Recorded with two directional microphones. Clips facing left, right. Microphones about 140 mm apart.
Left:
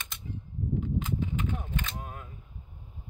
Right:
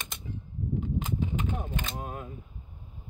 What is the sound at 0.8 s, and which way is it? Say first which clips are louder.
Cap gun: right 1 dB; 20° right (ahead or behind).